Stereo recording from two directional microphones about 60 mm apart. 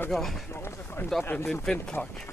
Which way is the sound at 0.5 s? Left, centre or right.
Left.